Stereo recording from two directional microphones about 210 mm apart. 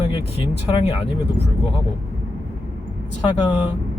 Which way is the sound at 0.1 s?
25° left (ahead or behind).